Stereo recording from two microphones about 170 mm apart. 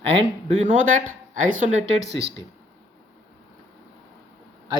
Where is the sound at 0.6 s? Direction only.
50° right (ahead or behind).